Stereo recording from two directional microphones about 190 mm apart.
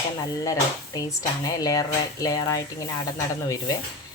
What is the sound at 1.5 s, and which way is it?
Speech, 20° left (ahead or behind).